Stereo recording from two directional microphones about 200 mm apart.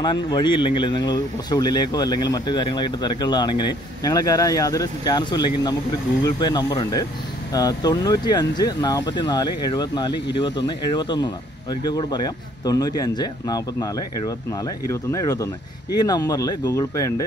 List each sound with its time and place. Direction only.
0.0 s speech: 25° left (ahead or behind)